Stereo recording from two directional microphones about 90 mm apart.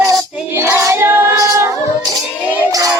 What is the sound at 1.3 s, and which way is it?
A capella, 40° right (ahead or behind).